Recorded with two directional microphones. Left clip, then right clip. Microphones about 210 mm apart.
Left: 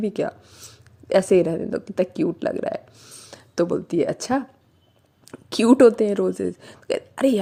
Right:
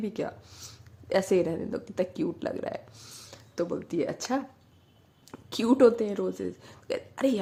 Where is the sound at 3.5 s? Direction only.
40° left (ahead or behind).